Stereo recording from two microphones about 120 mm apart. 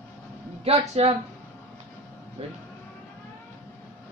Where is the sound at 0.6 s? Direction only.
60° right (ahead or behind).